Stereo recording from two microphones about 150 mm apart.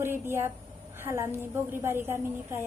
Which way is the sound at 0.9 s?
15° right (ahead or behind).